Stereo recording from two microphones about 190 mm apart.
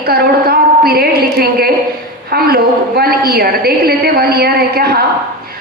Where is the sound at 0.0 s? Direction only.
55° right (ahead or behind).